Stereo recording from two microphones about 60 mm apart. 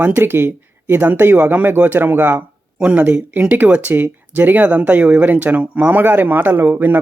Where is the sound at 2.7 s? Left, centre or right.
Centre.